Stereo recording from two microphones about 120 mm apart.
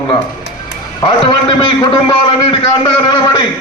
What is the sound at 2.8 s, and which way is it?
Speech, 40° left (ahead or behind).